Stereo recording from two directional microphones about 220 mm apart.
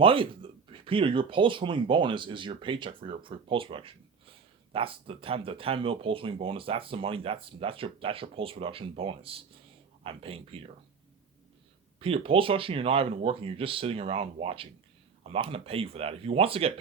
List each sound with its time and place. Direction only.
0.0 s speech: 25° right (ahead or behind)
11.9 s speech: 25° right (ahead or behind)